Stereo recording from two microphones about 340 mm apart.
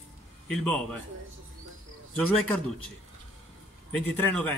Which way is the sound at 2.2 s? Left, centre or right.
Centre.